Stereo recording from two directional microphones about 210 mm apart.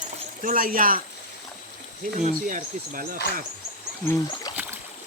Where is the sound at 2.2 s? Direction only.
40° right (ahead or behind).